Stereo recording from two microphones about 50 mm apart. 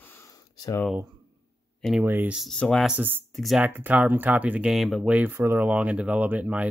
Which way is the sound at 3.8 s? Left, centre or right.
Right.